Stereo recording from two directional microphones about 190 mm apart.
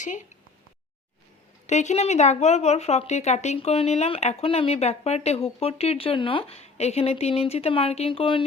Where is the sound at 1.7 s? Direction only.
40° left (ahead or behind).